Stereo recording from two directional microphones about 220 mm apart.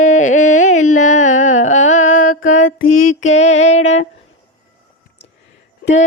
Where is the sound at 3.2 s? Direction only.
30° left (ahead or behind).